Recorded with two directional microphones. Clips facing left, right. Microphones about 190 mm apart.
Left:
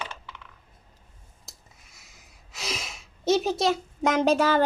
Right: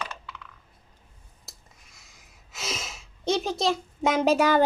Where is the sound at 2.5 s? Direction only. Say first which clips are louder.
Even; centre (ahead or behind).